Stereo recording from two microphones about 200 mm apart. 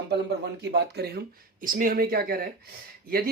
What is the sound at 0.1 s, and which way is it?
Speech, 55° right (ahead or behind).